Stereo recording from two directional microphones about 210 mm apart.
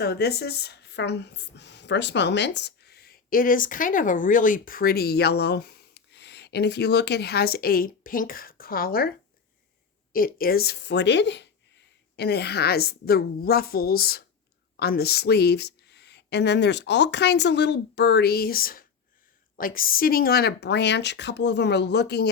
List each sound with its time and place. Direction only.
0.0 s speech: 50° left (ahead or behind)